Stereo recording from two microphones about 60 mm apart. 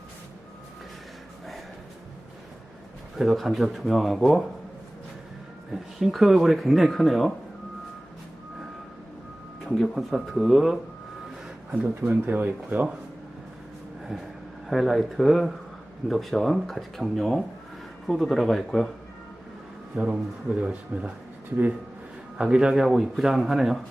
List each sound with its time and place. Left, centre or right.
3.2 s a man's voice: centre
6.0 s a man's voice: centre
9.6 s a man's voice: centre
11.7 s speech: right
14.7 s a man's voice: centre
20.0 s speech: right
22.4 s a man's voice: centre